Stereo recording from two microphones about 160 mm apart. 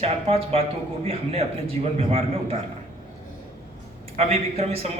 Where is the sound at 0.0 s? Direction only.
40° right (ahead or behind).